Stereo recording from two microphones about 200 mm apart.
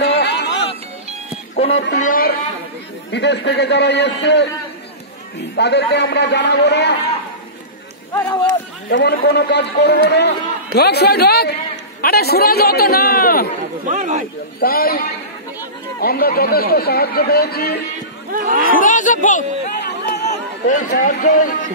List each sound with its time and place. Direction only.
0.2 s music: 60° left (ahead or behind)
1.7 s a man's voice: 60° left (ahead or behind)
2.0 s speech: 45° left (ahead or behind)
3.1 s a man's voice: 60° left (ahead or behind)
5.6 s a man's voice: 55° left (ahead or behind)
8.1 s speech: 15° left (ahead or behind)
8.8 s a man's voice: 60° left (ahead or behind)
13.8 s speech: 40° right (ahead or behind)
14.6 s speech: 50° left (ahead or behind)
18.3 s speech: 40° right (ahead or behind)
18.7 s speech: 40° left (ahead or behind)
19.8 s chatter: 55° left (ahead or behind)
20.2 s chatter: 40° left (ahead or behind)
20.9 s speech: 45° left (ahead or behind)